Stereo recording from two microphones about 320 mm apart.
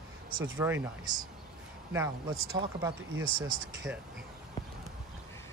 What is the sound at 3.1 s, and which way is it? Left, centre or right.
Speech, right.